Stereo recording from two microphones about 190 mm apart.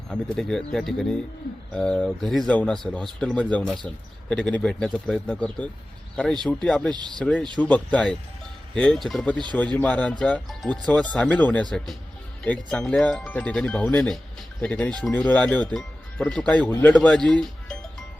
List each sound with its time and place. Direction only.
0.1 s speech: 5° left (ahead or behind)
6.9 s speech: 20° right (ahead or behind)
7.2 s speech: 5° left (ahead or behind)